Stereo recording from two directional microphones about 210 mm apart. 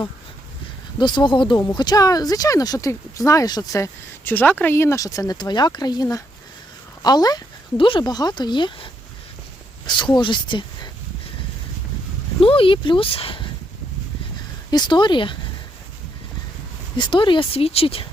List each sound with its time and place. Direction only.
0.9 s speech: 20° left (ahead or behind)
12.4 s speech: 25° left (ahead or behind)
14.7 s speech: 20° left (ahead or behind)
17.0 s speech: 20° left (ahead or behind)